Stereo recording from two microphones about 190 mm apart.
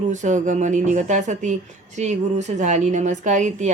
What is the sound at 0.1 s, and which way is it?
Speech, 40° right (ahead or behind).